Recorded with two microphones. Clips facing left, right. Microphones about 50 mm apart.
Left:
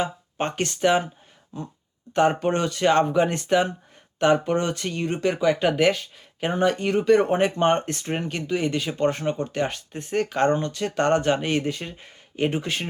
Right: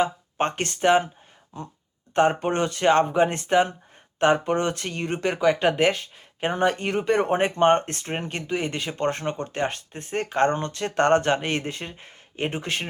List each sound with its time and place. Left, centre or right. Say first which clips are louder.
0.0 s speech: right 3 dB; right
2.1 s speech: even; right